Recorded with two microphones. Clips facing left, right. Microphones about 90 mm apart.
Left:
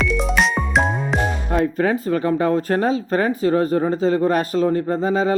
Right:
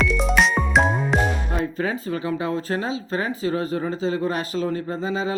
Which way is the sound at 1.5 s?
45° left (ahead or behind).